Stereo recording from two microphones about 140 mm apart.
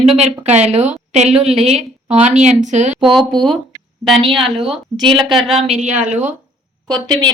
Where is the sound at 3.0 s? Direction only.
Centre (ahead or behind).